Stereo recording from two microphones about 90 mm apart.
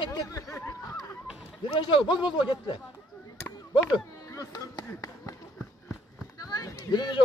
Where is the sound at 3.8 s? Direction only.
35° left (ahead or behind).